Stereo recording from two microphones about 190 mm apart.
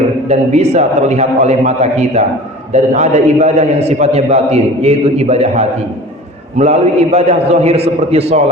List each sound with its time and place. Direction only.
0.3 s a man's voice: 35° right (ahead or behind)